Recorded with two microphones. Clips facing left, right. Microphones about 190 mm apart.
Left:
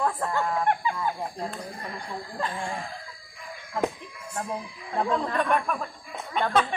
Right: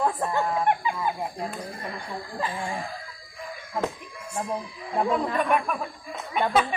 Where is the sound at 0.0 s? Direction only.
20° right (ahead or behind).